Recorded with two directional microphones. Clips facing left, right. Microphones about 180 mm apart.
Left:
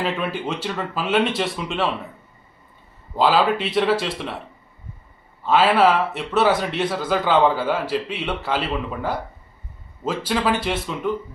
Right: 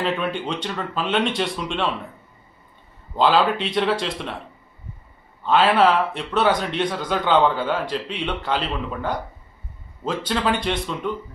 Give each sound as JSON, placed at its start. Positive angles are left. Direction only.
{"t": 0.0, "sound": "speech", "side_deg": 5}
{"t": 3.2, "sound": "speech", "side_deg": 5}
{"t": 5.5, "sound": "speech", "side_deg": 5}